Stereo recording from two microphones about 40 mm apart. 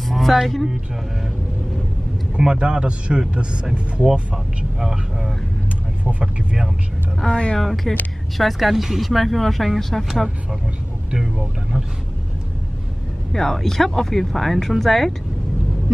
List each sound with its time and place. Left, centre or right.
0.1 s speech: centre
2.3 s a man's voice: right
4.7 s speech: centre
7.2 s speech: left
7.5 s speech: centre
13.3 s speech: centre